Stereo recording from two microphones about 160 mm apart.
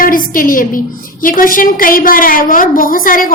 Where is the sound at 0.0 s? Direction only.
60° left (ahead or behind).